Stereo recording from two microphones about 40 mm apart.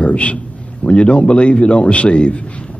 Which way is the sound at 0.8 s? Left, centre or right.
Left.